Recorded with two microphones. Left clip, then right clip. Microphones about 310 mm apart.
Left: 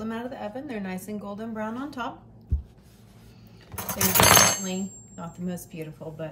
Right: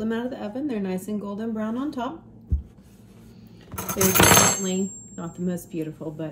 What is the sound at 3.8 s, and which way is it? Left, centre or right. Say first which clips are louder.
Keys jangling: right 4 dB; left.